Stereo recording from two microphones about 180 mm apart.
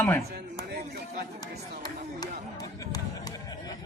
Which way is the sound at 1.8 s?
20° left (ahead or behind).